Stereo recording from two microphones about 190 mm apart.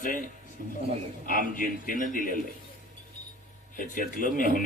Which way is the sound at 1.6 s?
45° left (ahead or behind).